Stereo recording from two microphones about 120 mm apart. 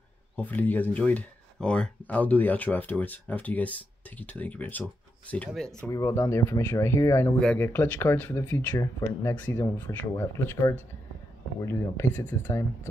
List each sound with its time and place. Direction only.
0.4 s speech: 15° left (ahead or behind)
5.9 s speech: 25° left (ahead or behind)
7.3 s speech: 10° left (ahead or behind)